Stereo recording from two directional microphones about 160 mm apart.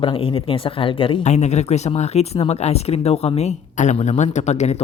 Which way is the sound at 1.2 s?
45° left (ahead or behind).